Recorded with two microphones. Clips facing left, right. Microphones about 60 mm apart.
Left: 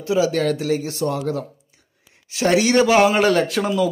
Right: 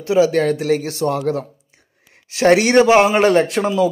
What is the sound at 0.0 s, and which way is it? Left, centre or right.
A man's voice, right.